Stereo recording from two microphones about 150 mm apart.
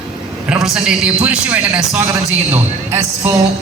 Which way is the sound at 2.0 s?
20° right (ahead or behind).